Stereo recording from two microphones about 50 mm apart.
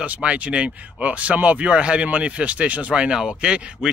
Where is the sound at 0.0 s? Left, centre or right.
Right.